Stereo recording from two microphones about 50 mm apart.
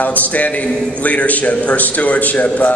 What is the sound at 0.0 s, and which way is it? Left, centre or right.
A man's voice, left.